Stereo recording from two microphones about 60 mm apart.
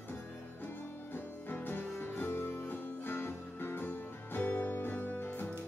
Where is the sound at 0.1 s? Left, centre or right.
Left.